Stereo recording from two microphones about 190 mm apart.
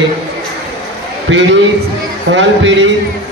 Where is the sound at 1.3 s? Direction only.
75° right (ahead or behind).